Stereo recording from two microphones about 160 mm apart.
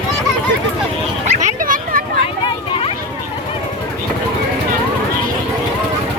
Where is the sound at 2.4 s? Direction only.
35° left (ahead or behind).